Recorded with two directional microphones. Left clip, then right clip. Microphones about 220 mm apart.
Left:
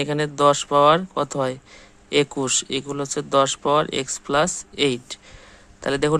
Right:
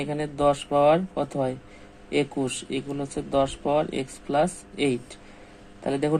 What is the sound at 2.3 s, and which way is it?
Speech, 60° left (ahead or behind).